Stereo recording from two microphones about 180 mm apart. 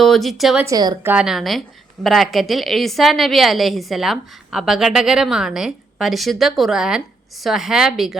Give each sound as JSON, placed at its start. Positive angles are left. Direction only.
{"t": 0.0, "sound": "speech", "side_deg": 0}
{"t": 0.6, "sound": "speech", "side_deg": -20}
{"t": 1.0, "sound": "a woman's voice", "side_deg": -5}